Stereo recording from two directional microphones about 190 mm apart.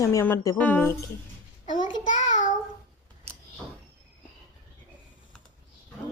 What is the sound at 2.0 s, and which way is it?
Child singing, 40° left (ahead or behind).